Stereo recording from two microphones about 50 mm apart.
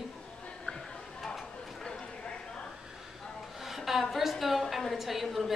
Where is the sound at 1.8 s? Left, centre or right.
Centre.